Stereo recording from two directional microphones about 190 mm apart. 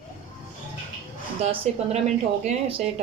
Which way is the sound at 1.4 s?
35° right (ahead or behind).